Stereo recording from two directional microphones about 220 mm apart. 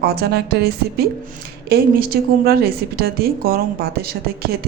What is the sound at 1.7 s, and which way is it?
A woman's voice, 45° right (ahead or behind).